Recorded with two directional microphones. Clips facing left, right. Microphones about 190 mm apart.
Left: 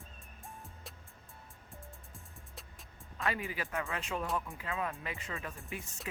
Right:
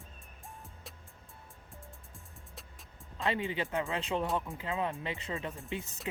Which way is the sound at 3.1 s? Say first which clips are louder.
Right 4 dB; 25° right (ahead or behind).